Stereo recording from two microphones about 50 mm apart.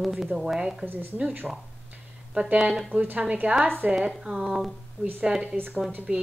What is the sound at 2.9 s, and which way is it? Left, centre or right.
A woman's voice, right.